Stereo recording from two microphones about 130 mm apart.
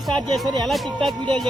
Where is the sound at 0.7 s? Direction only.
Centre (ahead or behind).